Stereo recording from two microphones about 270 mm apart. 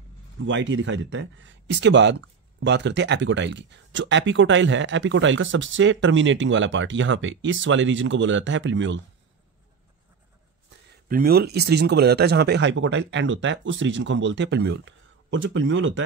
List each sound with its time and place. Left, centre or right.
0.5 s speech: right
11.1 s speech: right